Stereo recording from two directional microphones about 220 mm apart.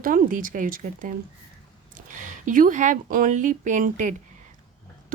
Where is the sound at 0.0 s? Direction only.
40° right (ahead or behind).